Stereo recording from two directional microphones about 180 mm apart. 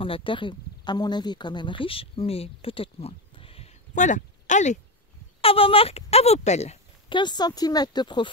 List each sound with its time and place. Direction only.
0.0 s speech: 30° left (ahead or behind)
5.4 s speech: 30° left (ahead or behind)